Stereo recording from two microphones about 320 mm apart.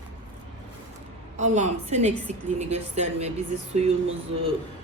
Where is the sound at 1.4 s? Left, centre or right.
Right.